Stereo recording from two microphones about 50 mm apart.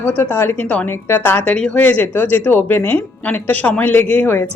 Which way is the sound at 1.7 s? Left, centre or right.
Left.